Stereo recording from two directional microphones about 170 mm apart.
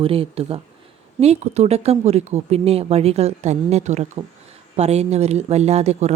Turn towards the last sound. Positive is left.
turn(degrees=-40)  # may be behind; listen again after turning